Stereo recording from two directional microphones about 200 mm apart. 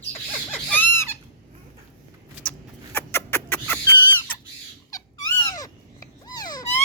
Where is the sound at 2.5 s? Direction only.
10° left (ahead or behind).